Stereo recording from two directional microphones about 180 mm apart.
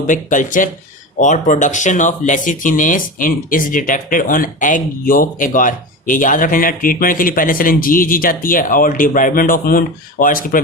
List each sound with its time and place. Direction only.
0.1 s speech: 45° left (ahead or behind)